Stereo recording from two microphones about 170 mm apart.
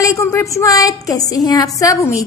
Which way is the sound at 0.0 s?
20° left (ahead or behind).